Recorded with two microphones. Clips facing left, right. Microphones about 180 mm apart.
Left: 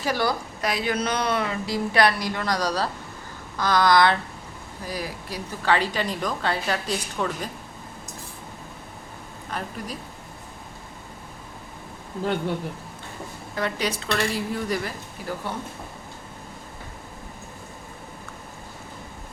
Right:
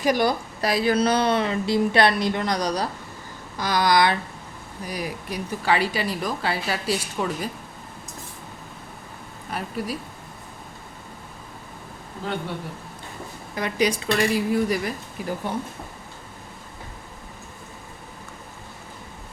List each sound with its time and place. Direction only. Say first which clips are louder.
0.0 s a woman's voice: right 4 dB; 15° right (ahead or behind)
0.6 s a woman's voice: right 5 dB; 35° right (ahead or behind); by 7.5 s 5° right (ahead or behind)
9.5 s a woman's voice: right 4 dB; 10° right (ahead or behind)
13.6 s a woman's voice: right 4 dB; 15° right (ahead or behind)